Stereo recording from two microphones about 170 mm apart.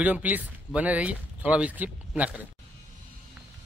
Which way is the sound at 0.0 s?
10° right (ahead or behind).